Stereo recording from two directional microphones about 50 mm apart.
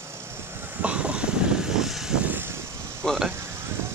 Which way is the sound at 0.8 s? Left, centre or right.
Right.